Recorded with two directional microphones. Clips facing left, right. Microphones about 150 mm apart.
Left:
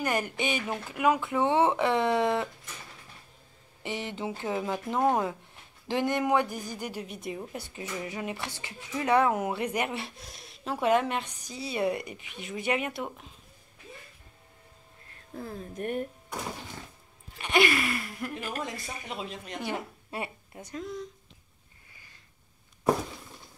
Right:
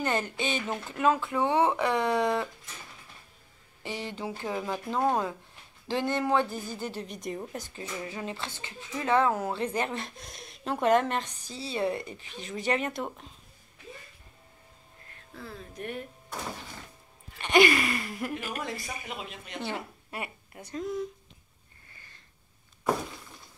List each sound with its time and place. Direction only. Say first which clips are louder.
0.0 s speech: even; 15° left (ahead or behind)
3.8 s speech: left 1 dB; 20° left (ahead or behind)
7.7 s speech: left 1 dB; 20° left (ahead or behind)
8.5 s a woman's voice: left 1 dB; 25° right (ahead or behind)
8.9 s speech: left 1 dB; 15° left (ahead or behind)
11.4 s a woman's voice: left 1 dB; 30° right (ahead or behind)
11.7 s speech: left 1 dB; 15° left (ahead or behind)
15.3 s speech: left 4 dB; 45° left (ahead or behind)
17.4 s speech: right 3 dB; centre (ahead or behind)
19.0 s speech: left 3 dB; 35° left (ahead or behind)
20.7 s speech: right 4 dB; 5° right (ahead or behind)